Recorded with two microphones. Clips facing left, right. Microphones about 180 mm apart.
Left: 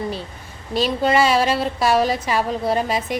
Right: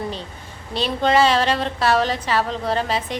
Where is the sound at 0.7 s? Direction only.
5° left (ahead or behind).